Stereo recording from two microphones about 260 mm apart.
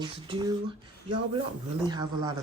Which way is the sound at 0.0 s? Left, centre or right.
Centre.